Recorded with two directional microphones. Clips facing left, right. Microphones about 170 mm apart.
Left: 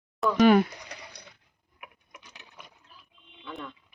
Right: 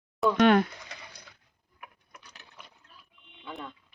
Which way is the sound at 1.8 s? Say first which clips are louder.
Left 1 dB; 15° left (ahead or behind).